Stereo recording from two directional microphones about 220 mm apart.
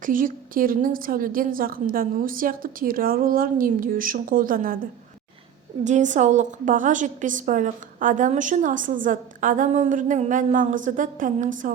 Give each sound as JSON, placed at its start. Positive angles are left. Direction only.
{"t": 0.0, "sound": "a woman's voice", "side_deg": -40}